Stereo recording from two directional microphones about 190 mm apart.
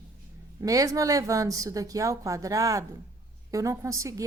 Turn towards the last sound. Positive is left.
turn(degrees=-15)  # may be behind; listen again after turning